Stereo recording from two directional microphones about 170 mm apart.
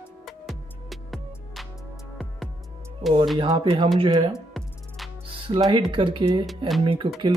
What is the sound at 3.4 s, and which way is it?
Speech, 30° right (ahead or behind).